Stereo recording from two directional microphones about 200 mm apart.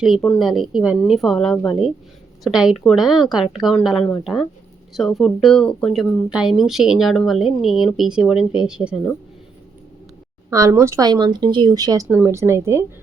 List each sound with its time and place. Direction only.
0.0 s speech: 5° left (ahead or behind)
10.5 s a woman's voice: 15° right (ahead or behind)